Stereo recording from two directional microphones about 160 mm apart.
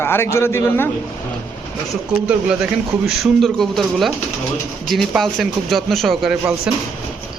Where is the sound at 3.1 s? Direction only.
Centre (ahead or behind).